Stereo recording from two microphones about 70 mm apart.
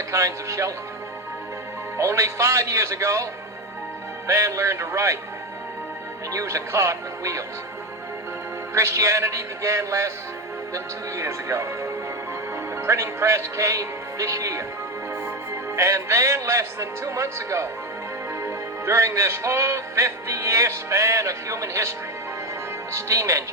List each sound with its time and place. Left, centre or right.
0.1 s music: right
2.0 s music: right
4.3 s music: right
6.3 s music: right
8.7 s music: right
11.2 s music: right
15.7 s music: right